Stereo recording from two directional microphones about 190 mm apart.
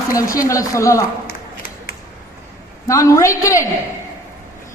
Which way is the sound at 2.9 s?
15° left (ahead or behind).